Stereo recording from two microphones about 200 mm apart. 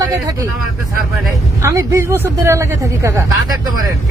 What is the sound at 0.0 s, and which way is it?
Speech, 15° right (ahead or behind).